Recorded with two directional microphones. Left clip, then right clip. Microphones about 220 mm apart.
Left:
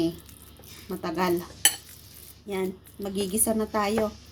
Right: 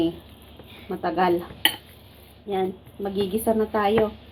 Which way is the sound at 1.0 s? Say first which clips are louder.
Right 5 dB; 35° left (ahead or behind).